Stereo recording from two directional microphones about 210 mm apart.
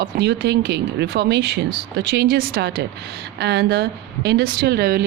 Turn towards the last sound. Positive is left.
turn(degrees=-45)  # may be behind; listen again after turning